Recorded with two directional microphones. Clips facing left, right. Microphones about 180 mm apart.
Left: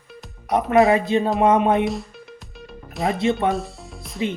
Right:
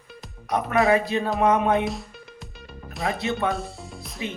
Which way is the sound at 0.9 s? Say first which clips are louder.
Left 3 dB; 25° left (ahead or behind).